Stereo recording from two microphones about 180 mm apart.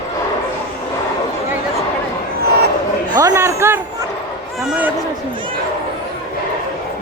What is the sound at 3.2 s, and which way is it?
Speech, 15° right (ahead or behind).